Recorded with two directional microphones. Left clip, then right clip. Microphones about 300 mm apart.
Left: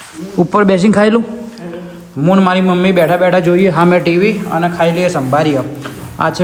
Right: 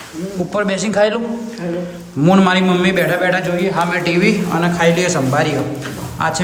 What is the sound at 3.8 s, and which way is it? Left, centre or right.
A man's voice, centre.